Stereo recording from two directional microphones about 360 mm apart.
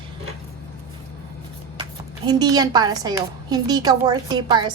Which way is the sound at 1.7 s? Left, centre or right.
Centre.